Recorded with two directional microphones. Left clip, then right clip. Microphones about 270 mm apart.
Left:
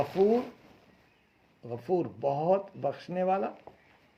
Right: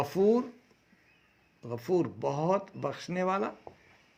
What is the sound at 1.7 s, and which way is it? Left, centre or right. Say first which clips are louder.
Speech: right 1 dB; right.